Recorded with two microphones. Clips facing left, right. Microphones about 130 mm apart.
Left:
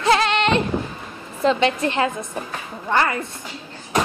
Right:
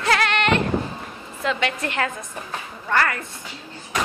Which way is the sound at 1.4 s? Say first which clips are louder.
Left 6 dB; 25° left (ahead or behind).